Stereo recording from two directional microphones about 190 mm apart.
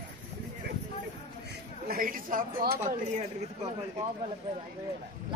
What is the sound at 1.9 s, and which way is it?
A woman's voice, 50° right (ahead or behind).